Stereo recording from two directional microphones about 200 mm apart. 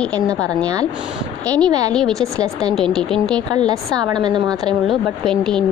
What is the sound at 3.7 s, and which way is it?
A woman's voice, 20° right (ahead or behind).